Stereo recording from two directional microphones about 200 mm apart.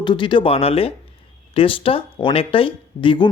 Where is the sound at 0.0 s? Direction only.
25° left (ahead or behind).